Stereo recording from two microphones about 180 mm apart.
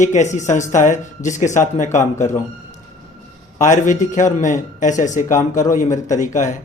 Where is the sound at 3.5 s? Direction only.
45° left (ahead or behind).